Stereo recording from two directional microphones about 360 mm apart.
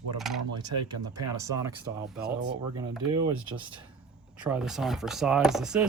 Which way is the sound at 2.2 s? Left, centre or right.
Right.